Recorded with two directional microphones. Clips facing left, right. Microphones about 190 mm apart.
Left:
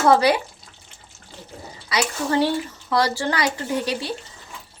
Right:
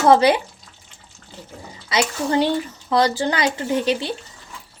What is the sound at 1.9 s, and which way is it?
Speech, 20° right (ahead or behind).